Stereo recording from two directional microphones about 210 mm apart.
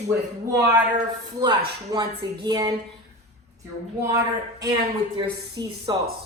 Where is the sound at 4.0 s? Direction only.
15° right (ahead or behind).